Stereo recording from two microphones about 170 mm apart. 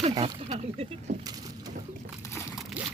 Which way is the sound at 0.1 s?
35° right (ahead or behind).